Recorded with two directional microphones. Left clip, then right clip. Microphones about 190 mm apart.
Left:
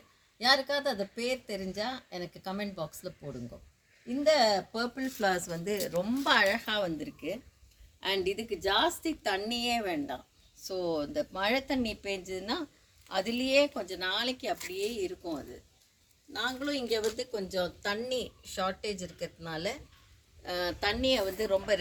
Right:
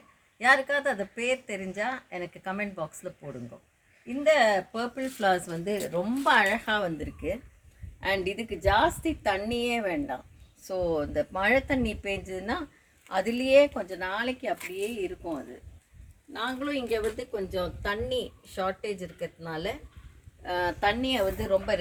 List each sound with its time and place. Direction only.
0.3 s speech: 10° left (ahead or behind)
4.7 s a woman's voice: 50° right (ahead or behind); by 19.6 s 30° right (ahead or behind)
20.4 s speech: 50° right (ahead or behind)